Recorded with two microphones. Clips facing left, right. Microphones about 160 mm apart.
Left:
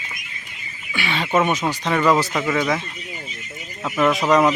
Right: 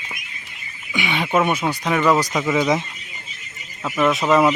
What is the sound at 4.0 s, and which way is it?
Speech, centre (ahead or behind).